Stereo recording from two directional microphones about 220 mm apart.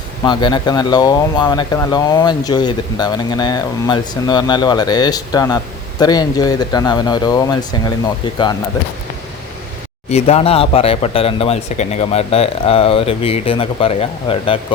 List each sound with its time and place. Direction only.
0.3 s speech: 20° left (ahead or behind)
10.1 s speech: 30° left (ahead or behind)